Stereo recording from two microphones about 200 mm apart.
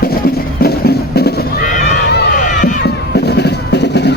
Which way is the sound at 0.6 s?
50° left (ahead or behind).